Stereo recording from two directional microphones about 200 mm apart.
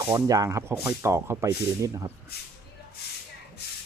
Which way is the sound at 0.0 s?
15° right (ahead or behind).